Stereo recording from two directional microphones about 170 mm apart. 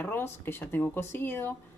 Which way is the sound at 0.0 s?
10° left (ahead or behind).